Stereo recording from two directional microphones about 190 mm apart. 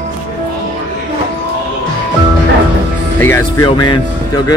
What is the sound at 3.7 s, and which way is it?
Speech, 25° left (ahead or behind).